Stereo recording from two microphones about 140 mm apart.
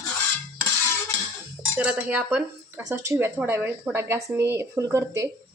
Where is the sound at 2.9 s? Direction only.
20° right (ahead or behind).